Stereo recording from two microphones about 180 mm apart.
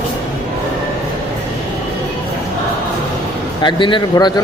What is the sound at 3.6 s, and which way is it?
Speech, 25° left (ahead or behind).